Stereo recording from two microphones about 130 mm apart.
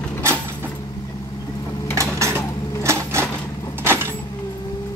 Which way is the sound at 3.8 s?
15° right (ahead or behind).